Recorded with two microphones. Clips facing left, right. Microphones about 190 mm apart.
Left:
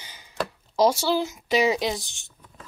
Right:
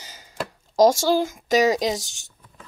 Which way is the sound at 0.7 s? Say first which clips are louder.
Right 4 dB; 45° right (ahead or behind).